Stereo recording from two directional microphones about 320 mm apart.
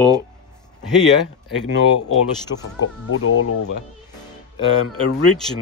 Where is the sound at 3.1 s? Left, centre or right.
Left.